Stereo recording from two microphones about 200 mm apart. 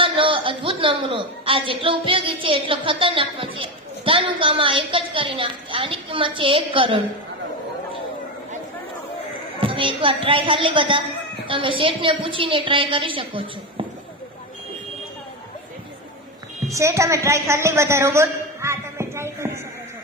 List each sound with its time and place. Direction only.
0.0 s a woman's voice: 25° right (ahead or behind)
9.6 s a woman's voice: 25° right (ahead or behind)
16.7 s a woman's voice: 15° right (ahead or behind)